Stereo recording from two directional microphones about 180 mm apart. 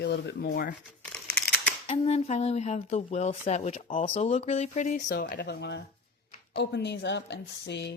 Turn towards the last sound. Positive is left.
turn(degrees=65)  # may be behind; listen again after turning